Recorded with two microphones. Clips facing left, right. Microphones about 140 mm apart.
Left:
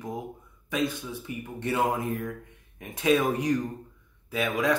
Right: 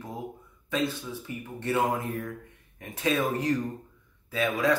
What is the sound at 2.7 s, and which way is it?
Speech, 15° left (ahead or behind).